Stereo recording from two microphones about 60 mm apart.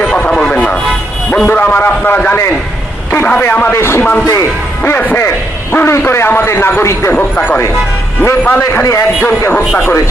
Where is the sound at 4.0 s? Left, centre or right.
Left.